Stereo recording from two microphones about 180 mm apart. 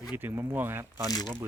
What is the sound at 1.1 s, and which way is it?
Speech, 20° left (ahead or behind).